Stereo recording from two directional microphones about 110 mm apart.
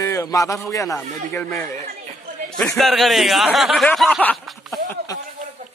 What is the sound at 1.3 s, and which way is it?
Speech, 20° left (ahead or behind).